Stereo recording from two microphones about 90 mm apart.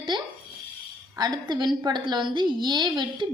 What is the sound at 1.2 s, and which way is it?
A woman's voice, 55° right (ahead or behind).